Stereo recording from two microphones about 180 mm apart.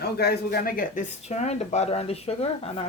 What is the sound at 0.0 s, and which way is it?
Speech, 60° left (ahead or behind).